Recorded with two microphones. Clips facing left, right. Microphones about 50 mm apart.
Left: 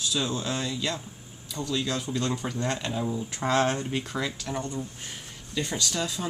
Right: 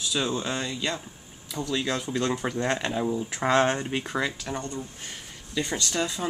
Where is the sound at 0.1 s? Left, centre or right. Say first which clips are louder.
Right 3 dB; centre.